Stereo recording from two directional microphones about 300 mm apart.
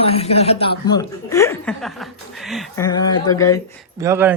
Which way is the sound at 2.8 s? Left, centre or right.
Centre.